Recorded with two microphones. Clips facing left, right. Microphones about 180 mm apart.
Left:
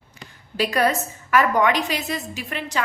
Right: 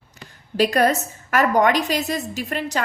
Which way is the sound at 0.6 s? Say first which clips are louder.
Right 3 dB; 45° right (ahead or behind).